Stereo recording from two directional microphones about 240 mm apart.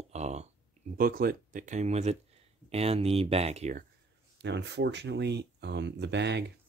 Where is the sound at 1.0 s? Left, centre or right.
Right.